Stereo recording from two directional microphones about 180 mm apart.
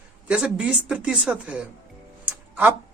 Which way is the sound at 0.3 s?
5° right (ahead or behind).